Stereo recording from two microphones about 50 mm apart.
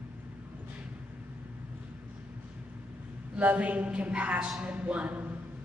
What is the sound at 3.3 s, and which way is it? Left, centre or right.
A man's voice, right.